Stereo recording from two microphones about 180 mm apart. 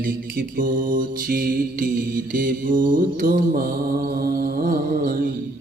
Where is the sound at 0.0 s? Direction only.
55° right (ahead or behind).